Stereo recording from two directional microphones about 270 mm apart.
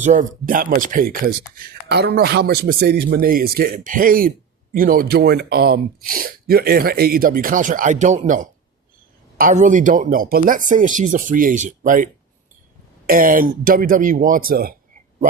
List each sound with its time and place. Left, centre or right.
0.0 s speech: right
13.1 s speech: right